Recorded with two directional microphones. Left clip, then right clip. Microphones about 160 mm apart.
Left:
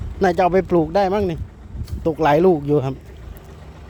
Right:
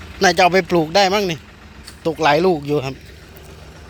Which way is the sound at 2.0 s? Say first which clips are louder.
Even; 30° left (ahead or behind).